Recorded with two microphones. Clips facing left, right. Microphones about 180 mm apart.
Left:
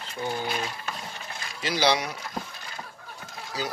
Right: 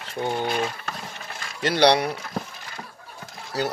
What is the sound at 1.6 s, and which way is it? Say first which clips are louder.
Speech: right 6 dB; 65° right (ahead or behind).